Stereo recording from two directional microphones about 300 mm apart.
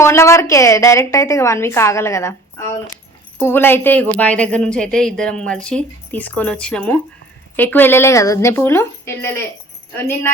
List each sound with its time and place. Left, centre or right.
0.0 s a woman's voice: centre